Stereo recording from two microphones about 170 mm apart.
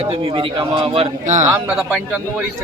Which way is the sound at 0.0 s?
35° right (ahead or behind).